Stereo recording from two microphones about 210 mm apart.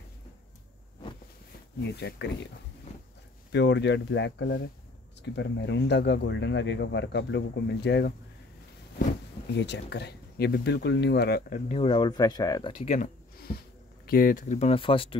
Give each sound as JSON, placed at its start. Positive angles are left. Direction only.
{"t": 1.8, "sound": "speech", "side_deg": 55}
{"t": 3.5, "sound": "speech", "side_deg": 55}
{"t": 9.5, "sound": "speech", "side_deg": 55}
{"t": 11.7, "sound": "speech", "side_deg": 25}
{"t": 12.7, "sound": "a sound", "side_deg": 35}
{"t": 14.0, "sound": "speech", "side_deg": 45}